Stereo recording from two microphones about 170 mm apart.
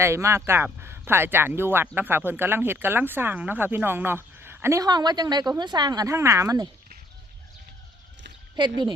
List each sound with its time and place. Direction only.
0.0 s speech: 15° right (ahead or behind)
8.5 s speech: 25° right (ahead or behind)